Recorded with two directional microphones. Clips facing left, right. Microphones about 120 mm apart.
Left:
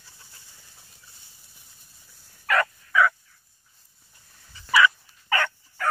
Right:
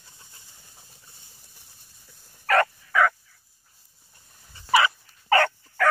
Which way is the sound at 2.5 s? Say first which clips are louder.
Right 3 dB; 40° right (ahead or behind).